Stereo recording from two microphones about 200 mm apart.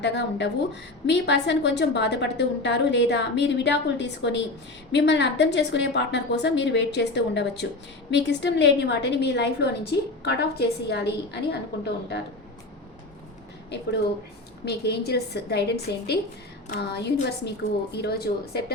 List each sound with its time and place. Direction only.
0.0 s a woman's voice: 60° left (ahead or behind)
14.6 s a woman's voice: 55° left (ahead or behind)